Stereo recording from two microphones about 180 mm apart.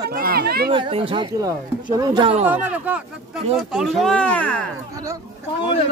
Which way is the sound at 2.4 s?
10° right (ahead or behind).